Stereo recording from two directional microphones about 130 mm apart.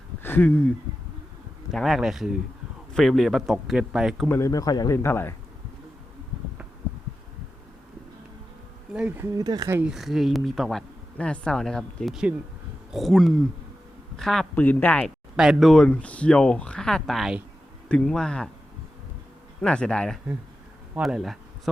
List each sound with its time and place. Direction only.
0.2 s speech: 15° left (ahead or behind)
1.7 s speech: centre (ahead or behind)
4.3 s speech: 25° left (ahead or behind)
5.0 s speech: 20° left (ahead or behind)
8.9 s speech: 10° right (ahead or behind); by 9.7 s 30° right (ahead or behind)
9.8 s speech: centre (ahead or behind)
15.4 s speech: centre (ahead or behind)
19.6 s speech: 10° left (ahead or behind)